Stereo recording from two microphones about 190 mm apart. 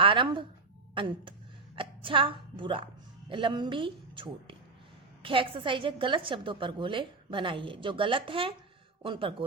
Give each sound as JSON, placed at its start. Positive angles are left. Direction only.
{"t": 0.0, "sound": "telephone", "side_deg": -25}
{"t": 0.9, "sound": "a woman's voice", "side_deg": -25}